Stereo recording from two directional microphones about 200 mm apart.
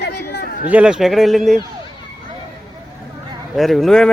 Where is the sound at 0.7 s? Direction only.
5° right (ahead or behind).